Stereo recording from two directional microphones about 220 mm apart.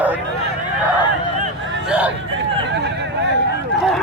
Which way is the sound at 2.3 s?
55° right (ahead or behind).